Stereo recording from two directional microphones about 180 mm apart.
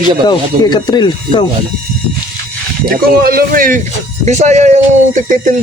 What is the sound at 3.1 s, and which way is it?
A man's voice, 55° right (ahead or behind).